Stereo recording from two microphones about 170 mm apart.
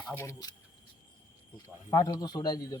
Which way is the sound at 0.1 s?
15° left (ahead or behind).